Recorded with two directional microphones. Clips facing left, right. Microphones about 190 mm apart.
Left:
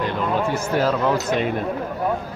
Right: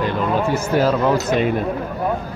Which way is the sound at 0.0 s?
5° right (ahead or behind).